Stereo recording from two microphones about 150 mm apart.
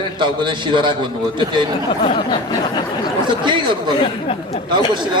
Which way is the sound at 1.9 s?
35° left (ahead or behind).